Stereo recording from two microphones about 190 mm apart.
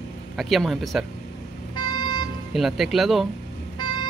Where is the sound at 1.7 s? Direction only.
25° left (ahead or behind).